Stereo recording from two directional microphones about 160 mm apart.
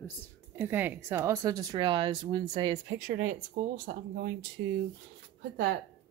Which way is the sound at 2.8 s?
60° right (ahead or behind).